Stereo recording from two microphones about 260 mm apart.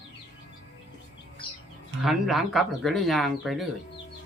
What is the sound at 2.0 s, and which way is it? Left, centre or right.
Speech, centre.